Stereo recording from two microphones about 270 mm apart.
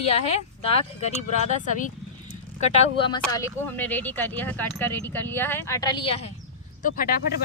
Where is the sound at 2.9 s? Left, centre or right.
Centre.